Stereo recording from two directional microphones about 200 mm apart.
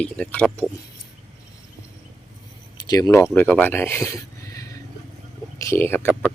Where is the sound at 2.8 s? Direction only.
20° left (ahead or behind).